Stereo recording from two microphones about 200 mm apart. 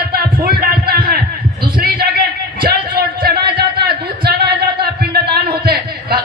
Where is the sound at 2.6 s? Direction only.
50° right (ahead or behind).